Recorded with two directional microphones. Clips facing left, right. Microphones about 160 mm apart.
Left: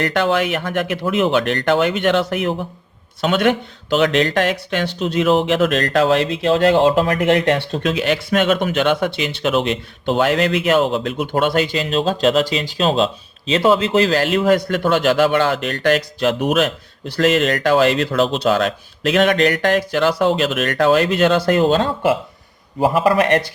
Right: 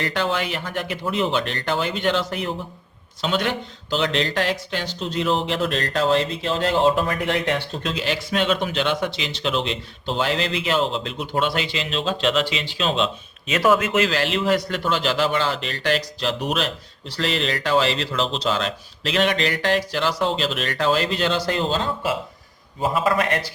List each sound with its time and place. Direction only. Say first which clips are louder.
0.0 s speech: left 6 dB; 60° left (ahead or behind)
7.3 s speech: left 6 dB; 65° left (ahead or behind); by 13.1 s 40° left (ahead or behind)
13.5 s a man's voice: left 4 dB; 25° left (ahead or behind); by 23.4 s 65° left (ahead or behind)